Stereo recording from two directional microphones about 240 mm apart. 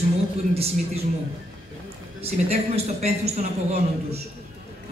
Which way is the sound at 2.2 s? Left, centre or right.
Right.